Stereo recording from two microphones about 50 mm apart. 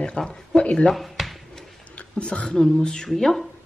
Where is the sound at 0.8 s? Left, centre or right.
Centre.